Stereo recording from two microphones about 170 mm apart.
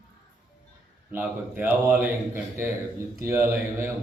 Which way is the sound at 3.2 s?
15° right (ahead or behind).